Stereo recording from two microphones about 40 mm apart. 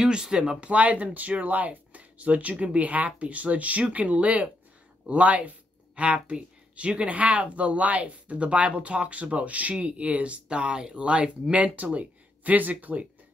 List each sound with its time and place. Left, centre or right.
0.0 s speech: centre
0.7 s speech: right